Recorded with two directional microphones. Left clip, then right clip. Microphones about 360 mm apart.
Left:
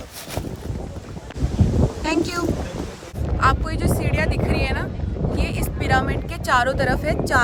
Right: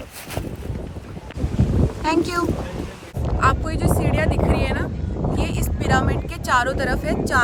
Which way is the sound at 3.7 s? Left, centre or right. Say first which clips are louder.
Right 2 dB; centre.